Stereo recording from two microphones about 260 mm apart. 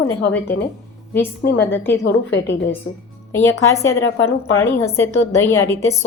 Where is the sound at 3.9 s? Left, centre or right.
Left.